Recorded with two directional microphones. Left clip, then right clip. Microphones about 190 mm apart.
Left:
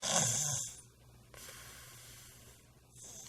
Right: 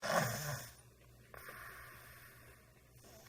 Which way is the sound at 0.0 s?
20° left (ahead or behind).